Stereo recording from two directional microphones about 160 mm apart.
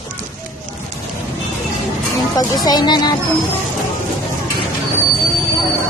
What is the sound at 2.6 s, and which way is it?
Speech, 25° left (ahead or behind).